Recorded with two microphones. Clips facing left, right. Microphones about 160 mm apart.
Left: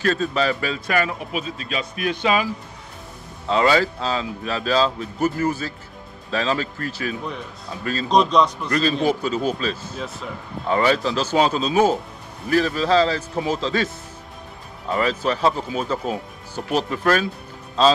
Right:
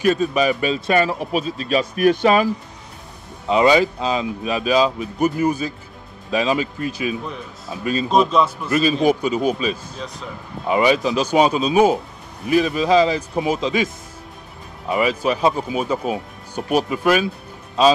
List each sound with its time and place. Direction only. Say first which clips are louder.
0.0 s speech: right 4 dB; 15° right (ahead or behind); by 2.5 s 45° right (ahead or behind)
3.4 s speech: right 3 dB; 15° right (ahead or behind)
7.2 s speech: even; centre (ahead or behind)
7.8 s speech: right 4 dB; 15° right (ahead or behind)
8.1 s speech: even; 5° right (ahead or behind)
14.9 s speech: right 2 dB; 10° right (ahead or behind)